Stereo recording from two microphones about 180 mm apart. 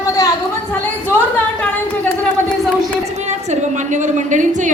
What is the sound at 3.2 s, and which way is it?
A woman's voice, 40° right (ahead or behind).